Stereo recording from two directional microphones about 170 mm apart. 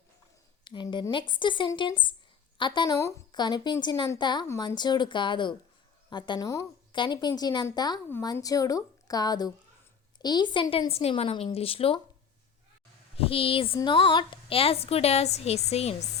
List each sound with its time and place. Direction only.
0.6 s a woman's voice: 25° left (ahead or behind)
13.1 s a woman's voice: 35° left (ahead or behind)